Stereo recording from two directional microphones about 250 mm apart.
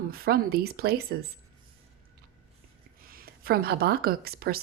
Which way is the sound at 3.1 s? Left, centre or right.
Right.